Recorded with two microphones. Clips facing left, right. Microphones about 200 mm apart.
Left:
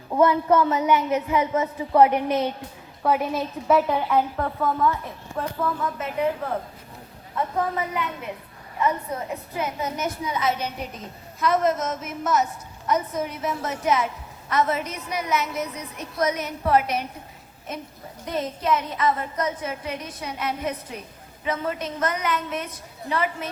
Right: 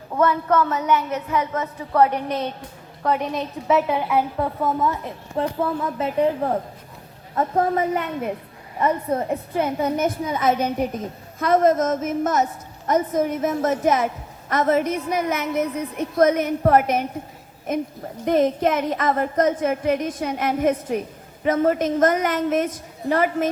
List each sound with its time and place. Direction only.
0.1 s a woman's voice: 15° left (ahead or behind); by 8.3 s 45° right (ahead or behind)
9.3 s a woman's voice: 55° right (ahead or behind)